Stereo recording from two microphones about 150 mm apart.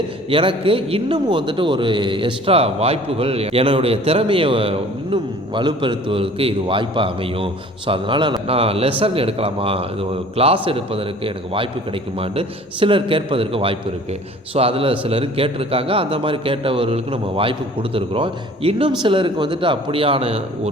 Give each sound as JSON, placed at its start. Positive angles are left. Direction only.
{"t": 0.3, "sound": "a man's voice", "side_deg": -35}